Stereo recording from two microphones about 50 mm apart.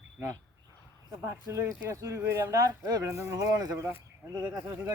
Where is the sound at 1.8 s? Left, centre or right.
Right.